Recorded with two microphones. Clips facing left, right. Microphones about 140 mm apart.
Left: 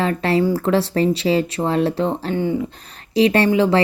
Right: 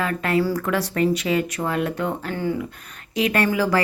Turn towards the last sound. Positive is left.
turn(degrees=25)  # may be behind; listen again after turning